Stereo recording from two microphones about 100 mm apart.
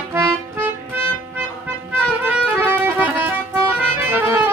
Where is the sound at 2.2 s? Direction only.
15° right (ahead or behind).